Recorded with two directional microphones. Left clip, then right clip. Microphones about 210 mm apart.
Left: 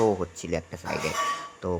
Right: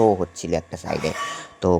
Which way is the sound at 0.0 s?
10° right (ahead or behind).